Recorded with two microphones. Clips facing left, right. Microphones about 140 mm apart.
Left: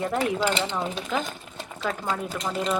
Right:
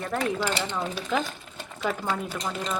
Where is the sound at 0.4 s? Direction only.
15° left (ahead or behind).